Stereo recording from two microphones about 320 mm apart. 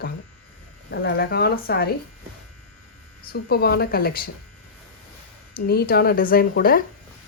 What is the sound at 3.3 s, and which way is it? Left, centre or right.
A woman's voice, left.